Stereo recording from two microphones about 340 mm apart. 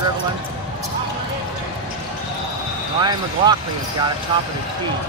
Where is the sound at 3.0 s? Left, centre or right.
Centre.